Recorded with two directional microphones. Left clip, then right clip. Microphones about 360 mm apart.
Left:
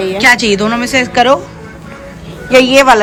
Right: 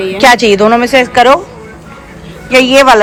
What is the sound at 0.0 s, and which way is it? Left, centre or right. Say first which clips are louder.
A woman's voice: right 3 dB; centre.